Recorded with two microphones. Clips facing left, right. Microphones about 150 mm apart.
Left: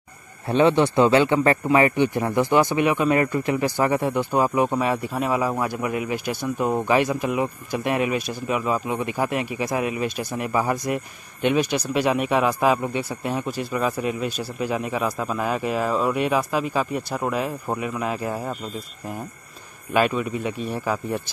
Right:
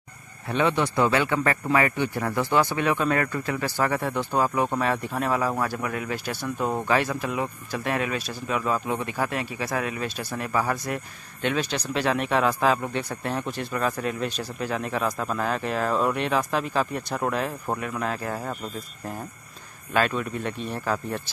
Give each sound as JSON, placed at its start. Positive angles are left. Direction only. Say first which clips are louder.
{"t": 0.5, "sound": "speech", "louder": "left 6 dB", "side_deg": 30}
{"t": 19.9, "sound": "speech", "louder": "left 3 dB", "side_deg": 10}